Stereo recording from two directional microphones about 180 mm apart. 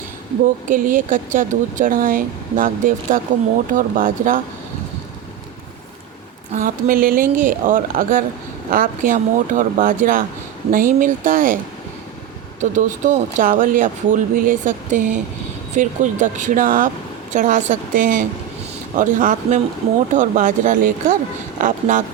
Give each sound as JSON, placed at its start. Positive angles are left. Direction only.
{"t": 0.7, "sound": "speech", "side_deg": -45}
{"t": 6.5, "sound": "speech", "side_deg": -50}
{"t": 12.7, "sound": "speech", "side_deg": -45}